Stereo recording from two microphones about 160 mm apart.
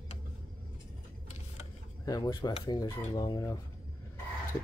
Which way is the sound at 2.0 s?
25° left (ahead or behind).